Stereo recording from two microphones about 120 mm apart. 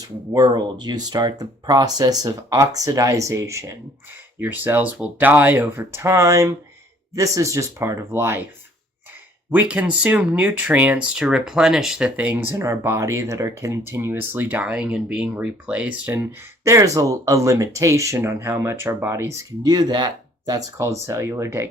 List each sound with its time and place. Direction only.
0.3 s speech: 35° right (ahead or behind); by 8.4 s 20° right (ahead or behind)
9.5 s speech: 15° right (ahead or behind)
16.1 s speech: 20° right (ahead or behind)